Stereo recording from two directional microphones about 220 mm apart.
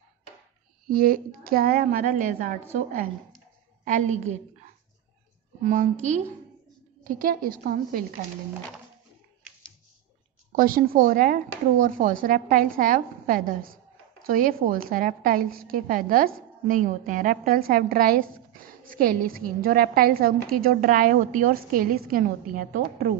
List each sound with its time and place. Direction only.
0.8 s a woman's voice: 40° right (ahead or behind)
3.8 s a woman's voice: 35° right (ahead or behind)
5.6 s a woman's voice: 35° right (ahead or behind)
10.5 s a woman's voice: 40° right (ahead or behind)